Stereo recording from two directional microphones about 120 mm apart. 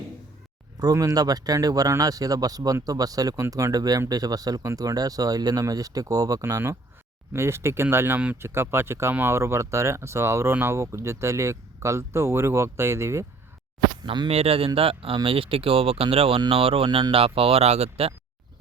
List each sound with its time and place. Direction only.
0.8 s speech: 30° right (ahead or behind)
14.0 s speech: 40° right (ahead or behind)
14.3 s speech: 55° right (ahead or behind)